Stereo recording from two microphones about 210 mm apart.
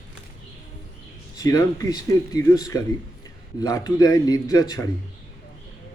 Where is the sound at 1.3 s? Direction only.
15° left (ahead or behind).